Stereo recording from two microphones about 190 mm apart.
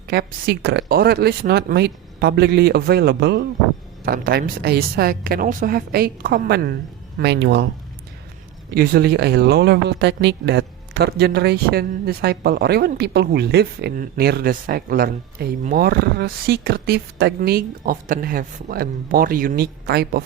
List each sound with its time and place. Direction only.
0.1 s a woman's voice: 55° right (ahead or behind)
7.2 s speech: 65° right (ahead or behind)
8.7 s speech: 50° right (ahead or behind)